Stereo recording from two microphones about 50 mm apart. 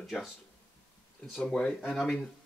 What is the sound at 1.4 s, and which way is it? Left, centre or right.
Speech, centre.